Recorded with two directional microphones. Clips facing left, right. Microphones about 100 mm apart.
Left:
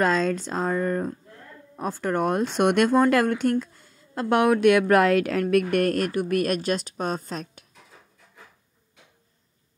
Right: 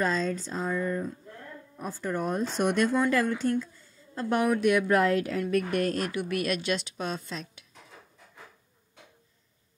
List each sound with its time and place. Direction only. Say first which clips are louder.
0.0 s speech: left 6 dB; 85° left; by 1.1 s 60° left (ahead or behind)
1.8 s speech: left 6 dB; 70° left (ahead or behind); by 7.6 s 45° left (ahead or behind)